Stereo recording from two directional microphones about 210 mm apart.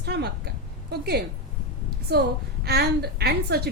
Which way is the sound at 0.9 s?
50° right (ahead or behind).